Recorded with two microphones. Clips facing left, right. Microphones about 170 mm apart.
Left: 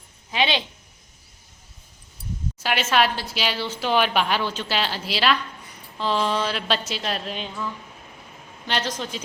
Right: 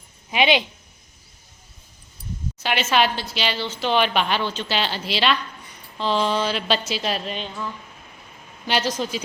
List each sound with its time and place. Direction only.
0.3 s a woman's voice: 15° right (ahead or behind)
2.6 s a woman's voice: centre (ahead or behind)
8.6 s a woman's voice: 10° right (ahead or behind)